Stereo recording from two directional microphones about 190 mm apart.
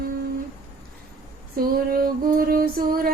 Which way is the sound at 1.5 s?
50° right (ahead or behind).